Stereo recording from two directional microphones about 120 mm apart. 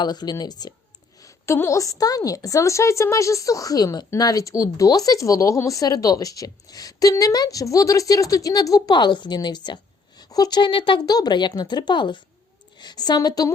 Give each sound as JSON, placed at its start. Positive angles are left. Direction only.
{"t": 0.0, "sound": "a woman's voice", "side_deg": 35}
{"t": 1.2, "sound": "a woman's voice", "side_deg": 25}